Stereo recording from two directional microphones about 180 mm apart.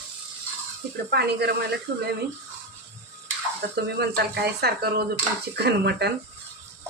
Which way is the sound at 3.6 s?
65° right (ahead or behind).